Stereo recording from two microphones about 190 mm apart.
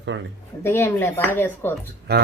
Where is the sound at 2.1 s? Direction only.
60° right (ahead or behind).